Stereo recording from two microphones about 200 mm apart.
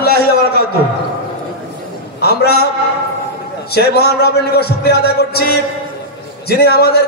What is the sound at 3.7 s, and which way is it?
A man's voice, 55° left (ahead or behind).